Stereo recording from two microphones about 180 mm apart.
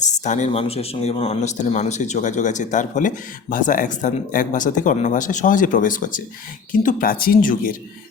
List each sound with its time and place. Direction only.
0.0 s speech: 40° left (ahead or behind)